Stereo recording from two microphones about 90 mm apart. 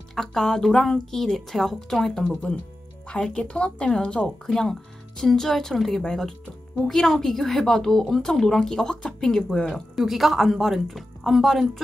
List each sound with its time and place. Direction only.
0.1 s a woman's voice: 5° left (ahead or behind)